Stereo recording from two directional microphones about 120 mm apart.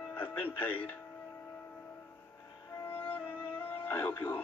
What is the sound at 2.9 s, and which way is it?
Music, 15° left (ahead or behind).